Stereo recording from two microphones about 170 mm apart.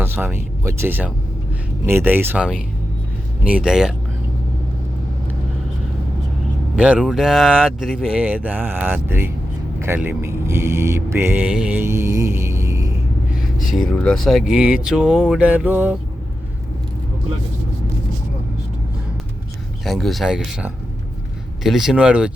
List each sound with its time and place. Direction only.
0.0 s speech: 10° right (ahead or behind)
6.7 s speech: 5° right (ahead or behind)
13.7 s speech: 5° left (ahead or behind)
19.8 s speech: centre (ahead or behind)